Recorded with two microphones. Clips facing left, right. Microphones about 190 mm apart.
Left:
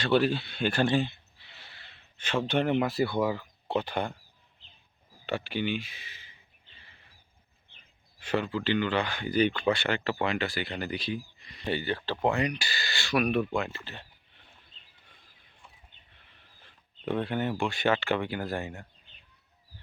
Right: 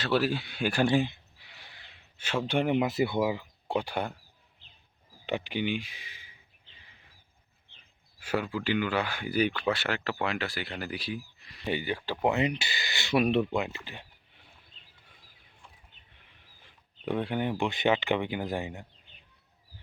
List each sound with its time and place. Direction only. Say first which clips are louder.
0.0 s a sound: left 2 dB; 5° right (ahead or behind)
2.5 s speech: even; 10° right (ahead or behind)
5.2 s speech: even; 15° right (ahead or behind)
6.7 s a sound: left 1 dB; 15° right (ahead or behind)
8.2 s speech: left 1 dB; 10° right (ahead or behind)
16.4 s speech: even; 10° right (ahead or behind)